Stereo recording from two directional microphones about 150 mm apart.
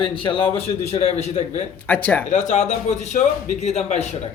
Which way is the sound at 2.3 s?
55° left (ahead or behind).